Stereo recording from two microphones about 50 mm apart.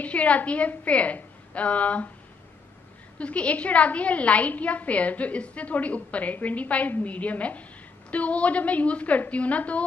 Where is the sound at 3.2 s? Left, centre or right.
Left.